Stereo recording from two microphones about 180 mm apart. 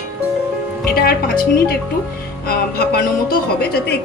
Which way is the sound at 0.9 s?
55° left (ahead or behind).